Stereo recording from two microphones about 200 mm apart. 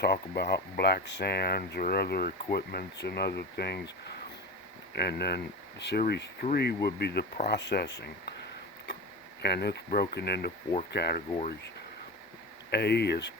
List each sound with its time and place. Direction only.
0.0 s speech: 55° left (ahead or behind)
9.4 s speech: 55° left (ahead or behind)
12.7 s speech: 55° left (ahead or behind)